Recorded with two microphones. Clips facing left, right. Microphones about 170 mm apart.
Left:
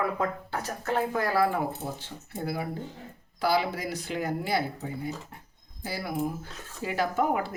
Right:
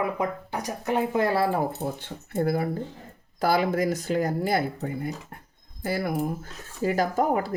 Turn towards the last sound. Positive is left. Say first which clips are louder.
# right 3 dB
turn(degrees=-40)  # may be behind; listen again after turning